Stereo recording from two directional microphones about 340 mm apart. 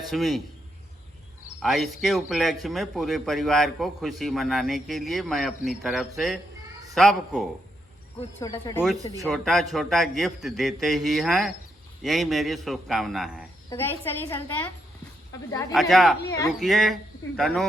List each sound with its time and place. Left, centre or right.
0.1 s a man's voice: centre
1.6 s a man's voice: centre